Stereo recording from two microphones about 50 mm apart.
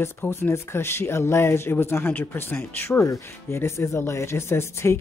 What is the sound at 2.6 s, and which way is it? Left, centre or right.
Speech, left.